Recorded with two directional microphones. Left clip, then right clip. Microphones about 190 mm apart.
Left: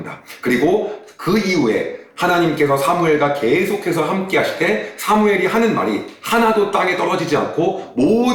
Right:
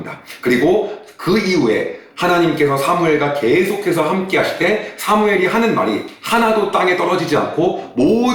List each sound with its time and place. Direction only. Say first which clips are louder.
0.4 s a man's voice: right 2 dB; centre (ahead or behind)